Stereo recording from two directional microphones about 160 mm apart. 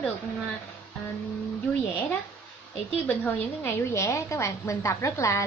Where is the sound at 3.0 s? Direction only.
10° left (ahead or behind).